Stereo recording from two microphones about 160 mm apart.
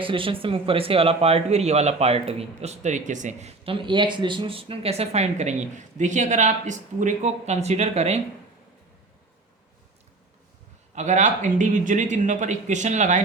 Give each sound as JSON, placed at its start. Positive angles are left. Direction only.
{"t": 0.0, "sound": "speech", "side_deg": -30}
{"t": 10.9, "sound": "speech", "side_deg": -45}